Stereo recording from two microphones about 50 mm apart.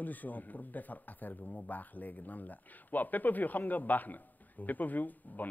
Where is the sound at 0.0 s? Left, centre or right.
Left.